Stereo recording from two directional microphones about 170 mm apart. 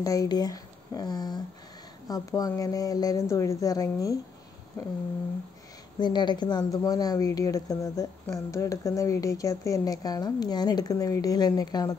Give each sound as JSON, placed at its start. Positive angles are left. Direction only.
{"t": 0.0, "sound": "a woman's voice", "side_deg": 20}
{"t": 5.9, "sound": "a woman's voice", "side_deg": 25}